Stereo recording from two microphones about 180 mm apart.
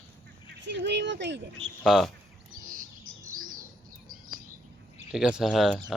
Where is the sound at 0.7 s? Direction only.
75° right (ahead or behind).